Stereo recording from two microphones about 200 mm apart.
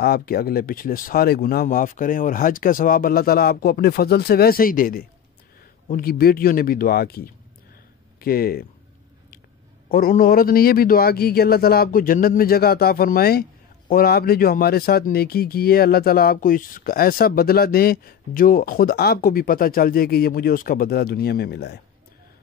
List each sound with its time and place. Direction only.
0.0 s a man's voice: 50° left (ahead or behind)
9.8 s a man's voice: 45° left (ahead or behind)